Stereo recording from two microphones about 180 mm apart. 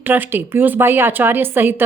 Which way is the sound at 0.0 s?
10° right (ahead or behind).